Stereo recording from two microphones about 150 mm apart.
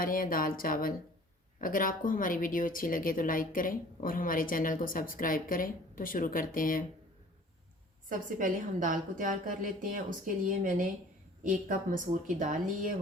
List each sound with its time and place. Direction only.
0.0 s a woman's voice: 70° left (ahead or behind)
8.1 s a woman's voice: 65° right (ahead or behind)